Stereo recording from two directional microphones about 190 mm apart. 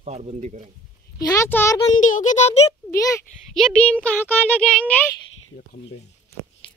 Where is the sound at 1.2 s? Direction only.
15° left (ahead or behind).